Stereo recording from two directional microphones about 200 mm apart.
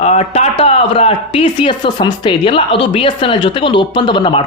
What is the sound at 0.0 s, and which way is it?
A man's voice, 35° left (ahead or behind).